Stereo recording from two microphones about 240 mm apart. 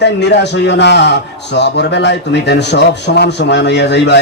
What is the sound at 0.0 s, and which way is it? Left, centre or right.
A man's voice, left.